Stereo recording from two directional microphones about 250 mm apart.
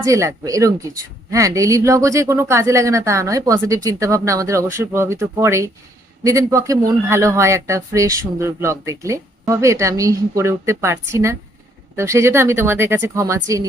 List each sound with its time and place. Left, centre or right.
0.0 s speech: centre